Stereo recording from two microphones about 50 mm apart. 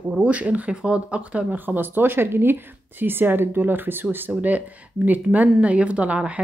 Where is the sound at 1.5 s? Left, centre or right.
Right.